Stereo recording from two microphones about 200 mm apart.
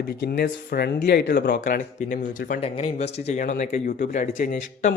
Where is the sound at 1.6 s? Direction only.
40° left (ahead or behind).